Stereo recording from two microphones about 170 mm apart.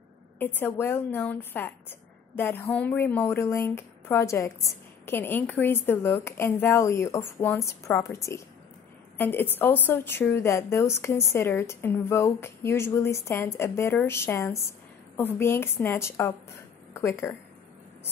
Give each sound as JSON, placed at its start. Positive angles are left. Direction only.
{"t": 0.4, "sound": "a woman's voice", "side_deg": 10}